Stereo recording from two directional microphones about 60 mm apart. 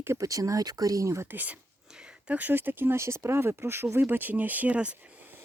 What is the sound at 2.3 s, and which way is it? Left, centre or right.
Speech, right.